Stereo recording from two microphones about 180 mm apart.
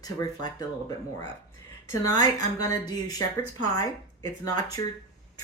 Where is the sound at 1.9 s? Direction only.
20° left (ahead or behind).